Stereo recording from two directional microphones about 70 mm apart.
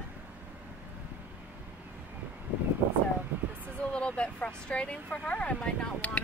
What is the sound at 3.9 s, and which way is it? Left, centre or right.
Speech, centre.